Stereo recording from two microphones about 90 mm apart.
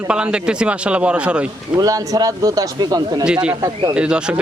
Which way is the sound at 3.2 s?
10° right (ahead or behind).